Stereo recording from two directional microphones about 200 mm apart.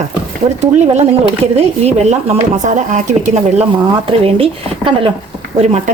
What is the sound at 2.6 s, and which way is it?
A woman's voice, 35° right (ahead or behind).